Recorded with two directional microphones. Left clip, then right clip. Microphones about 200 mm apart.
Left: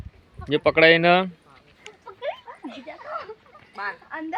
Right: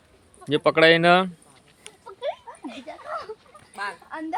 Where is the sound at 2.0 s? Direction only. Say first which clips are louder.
Right 1 dB; 5° left (ahead or behind).